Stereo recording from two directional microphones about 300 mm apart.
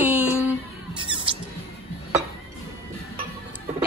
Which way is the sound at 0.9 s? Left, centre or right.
Centre.